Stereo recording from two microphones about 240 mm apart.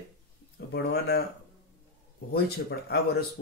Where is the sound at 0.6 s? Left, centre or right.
Left.